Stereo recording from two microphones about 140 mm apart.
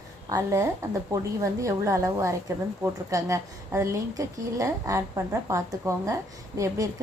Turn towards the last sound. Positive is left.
turn(degrees=-25)  # may be behind; listen again after turning